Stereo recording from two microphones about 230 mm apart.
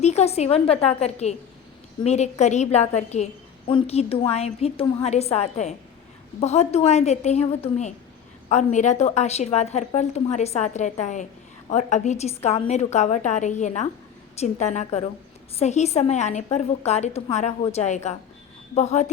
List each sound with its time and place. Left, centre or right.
0.0 s a woman's voice: left